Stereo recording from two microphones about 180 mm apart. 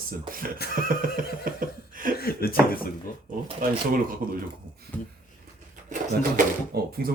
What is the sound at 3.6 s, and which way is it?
Speech, 50° right (ahead or behind).